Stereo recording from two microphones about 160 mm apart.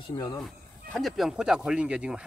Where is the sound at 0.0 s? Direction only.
25° left (ahead or behind).